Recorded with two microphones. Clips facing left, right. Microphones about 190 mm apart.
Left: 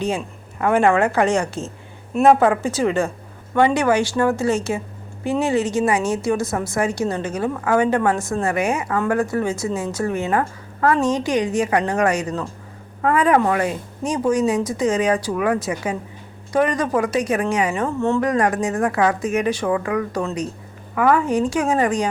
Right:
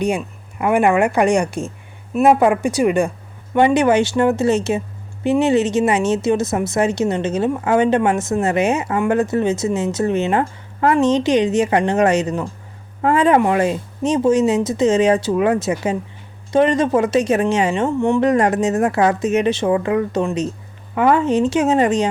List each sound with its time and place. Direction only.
0.2 s speech: 15° right (ahead or behind)